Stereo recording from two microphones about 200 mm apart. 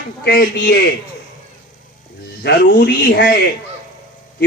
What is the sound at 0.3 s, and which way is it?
Speech, 50° left (ahead or behind).